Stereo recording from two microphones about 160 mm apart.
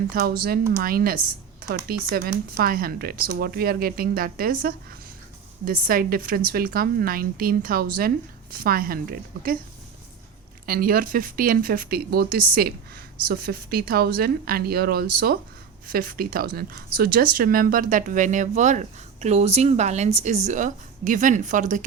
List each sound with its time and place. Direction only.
0.1 s speech: 75° right (ahead or behind)
5.9 s a woman's voice: 65° right (ahead or behind)
10.7 s a woman's voice: 65° right (ahead or behind)